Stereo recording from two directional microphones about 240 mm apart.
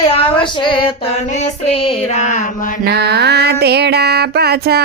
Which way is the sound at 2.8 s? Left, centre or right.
Right.